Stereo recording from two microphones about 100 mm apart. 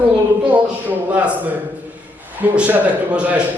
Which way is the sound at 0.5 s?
15° right (ahead or behind).